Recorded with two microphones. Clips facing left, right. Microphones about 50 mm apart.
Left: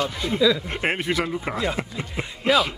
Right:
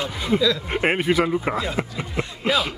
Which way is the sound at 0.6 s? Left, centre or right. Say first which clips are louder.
Right 4 dB; centre.